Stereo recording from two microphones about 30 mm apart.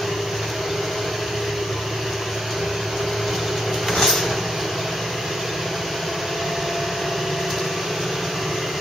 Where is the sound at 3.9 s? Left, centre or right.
Centre.